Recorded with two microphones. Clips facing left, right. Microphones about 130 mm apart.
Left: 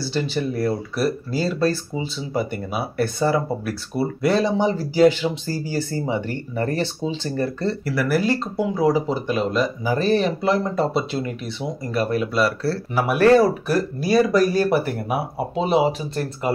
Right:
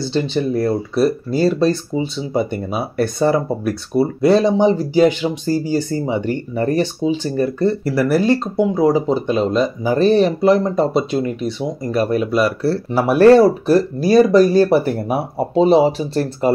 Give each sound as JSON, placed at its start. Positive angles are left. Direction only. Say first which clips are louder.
{"t": 0.0, "sound": "speech", "louder": "right 5 dB", "side_deg": -20}
{"t": 7.8, "sound": "speech", "louder": "right 2 dB", "side_deg": -25}
{"t": 12.9, "sound": "speech", "louder": "right 5 dB", "side_deg": -30}